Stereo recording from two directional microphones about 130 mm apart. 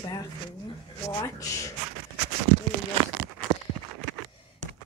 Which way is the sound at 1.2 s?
25° left (ahead or behind).